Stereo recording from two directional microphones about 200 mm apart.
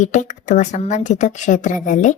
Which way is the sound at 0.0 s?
35° left (ahead or behind).